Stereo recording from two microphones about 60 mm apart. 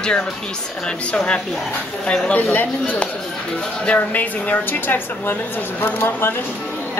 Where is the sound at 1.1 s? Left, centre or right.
Centre.